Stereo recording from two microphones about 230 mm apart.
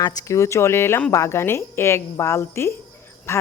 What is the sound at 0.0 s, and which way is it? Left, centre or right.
A woman's voice, centre.